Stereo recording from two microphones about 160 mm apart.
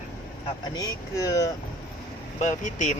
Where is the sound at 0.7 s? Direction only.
25° left (ahead or behind).